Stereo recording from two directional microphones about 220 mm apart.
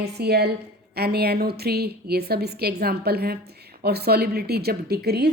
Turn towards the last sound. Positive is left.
turn(degrees=-45)  # may be behind; listen again after turning